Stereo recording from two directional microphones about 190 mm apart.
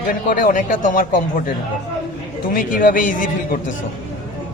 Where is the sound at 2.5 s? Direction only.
45° left (ahead or behind).